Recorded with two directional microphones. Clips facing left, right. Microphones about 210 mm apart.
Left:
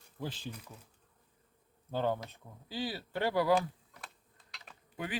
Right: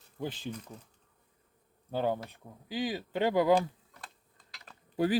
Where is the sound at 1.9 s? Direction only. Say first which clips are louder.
Right 2 dB; 15° right (ahead or behind).